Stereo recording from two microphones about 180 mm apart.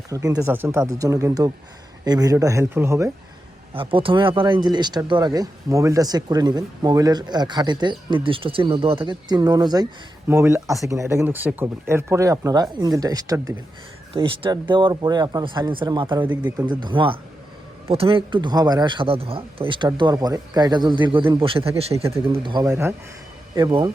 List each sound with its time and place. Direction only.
0.1 s speech: 20° right (ahead or behind)
3.8 s speech: 30° right (ahead or behind)
14.1 s speech: 30° right (ahead or behind)